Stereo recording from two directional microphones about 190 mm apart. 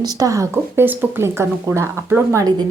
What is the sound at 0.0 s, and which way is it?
Speech, 20° right (ahead or behind).